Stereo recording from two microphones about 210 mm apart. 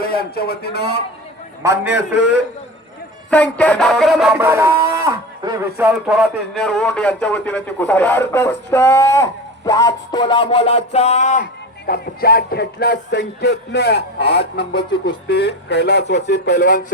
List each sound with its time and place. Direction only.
0.0 s music: 45° left (ahead or behind)
1.6 s a man's voice: 55° left (ahead or behind)
3.2 s music: 5° left (ahead or behind); by 5.9 s 15° right (ahead or behind)
5.9 s music: centre (ahead or behind)
7.5 s speech: 10° left (ahead or behind); by 11.4 s 35° left (ahead or behind)
11.9 s music: 45° left (ahead or behind)